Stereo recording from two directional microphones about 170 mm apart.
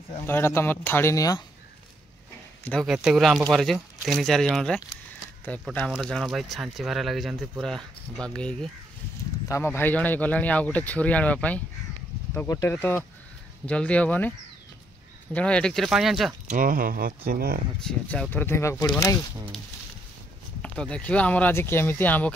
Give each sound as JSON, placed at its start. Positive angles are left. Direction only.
{"t": 0.3, "sound": "speech", "side_deg": 15}
{"t": 2.6, "sound": "speech", "side_deg": 5}
{"t": 15.3, "sound": "speech", "side_deg": 5}
{"t": 16.4, "sound": "speech", "side_deg": -55}
{"t": 17.8, "sound": "speech", "side_deg": 5}
{"t": 20.6, "sound": "speech", "side_deg": 5}